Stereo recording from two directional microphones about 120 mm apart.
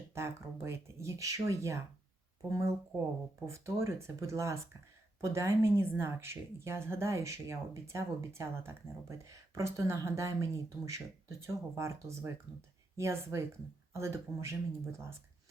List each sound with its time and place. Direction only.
0.1 s a woman's voice: 20° right (ahead or behind)